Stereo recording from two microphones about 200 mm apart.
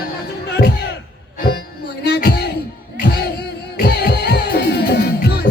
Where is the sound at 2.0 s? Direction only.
55° left (ahead or behind).